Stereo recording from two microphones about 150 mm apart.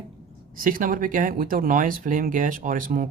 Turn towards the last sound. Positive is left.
turn(degrees=-65)  # may be behind; listen again after turning